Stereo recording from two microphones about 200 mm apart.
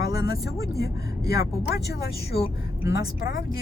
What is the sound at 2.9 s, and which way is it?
Speech, 50° left (ahead or behind).